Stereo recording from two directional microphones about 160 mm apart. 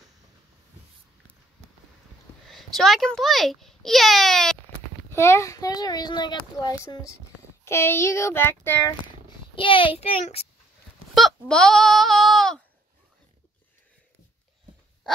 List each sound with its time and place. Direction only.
2.4 s a child's voice: centre (ahead or behind)
5.1 s a child's voice: 15° left (ahead or behind)
7.6 s child singing: 15° left (ahead or behind)
9.6 s a child's voice: 35° left (ahead or behind)
11.1 s speech: 5° left (ahead or behind)